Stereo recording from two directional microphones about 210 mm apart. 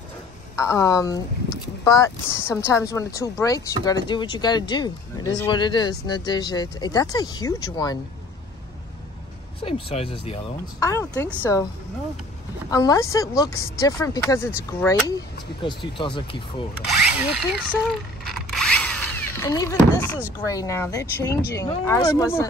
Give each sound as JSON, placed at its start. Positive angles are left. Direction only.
{"t": 0.7, "sound": "speech", "side_deg": 15}
{"t": 9.6, "sound": "speech", "side_deg": 25}
{"t": 10.8, "sound": "speech", "side_deg": 15}
{"t": 12.6, "sound": "speech", "side_deg": 15}
{"t": 16.8, "sound": "speech", "side_deg": 0}
{"t": 18.3, "sound": "a sound", "side_deg": 0}
{"t": 20.4, "sound": "speech", "side_deg": 15}